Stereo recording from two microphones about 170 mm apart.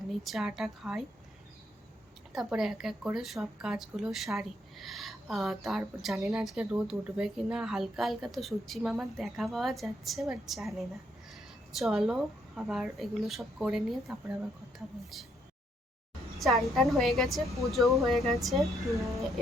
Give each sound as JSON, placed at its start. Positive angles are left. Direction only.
{"t": 0.1, "sound": "a woman's voice", "side_deg": 0}
{"t": 2.3, "sound": "a woman's voice", "side_deg": 0}
{"t": 16.4, "sound": "a woman's voice", "side_deg": 0}